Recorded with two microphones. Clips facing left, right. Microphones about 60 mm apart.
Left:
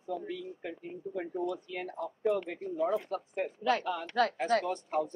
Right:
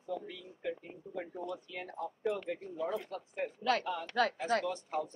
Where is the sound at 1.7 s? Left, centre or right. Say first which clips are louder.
Left 4 dB; left.